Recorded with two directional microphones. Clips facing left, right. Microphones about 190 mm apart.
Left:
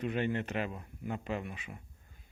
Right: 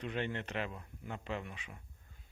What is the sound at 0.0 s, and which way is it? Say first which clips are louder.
Speech: left 5 dB; 10° left (ahead or behind).